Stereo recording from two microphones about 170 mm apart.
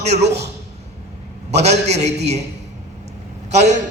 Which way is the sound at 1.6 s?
40° right (ahead or behind).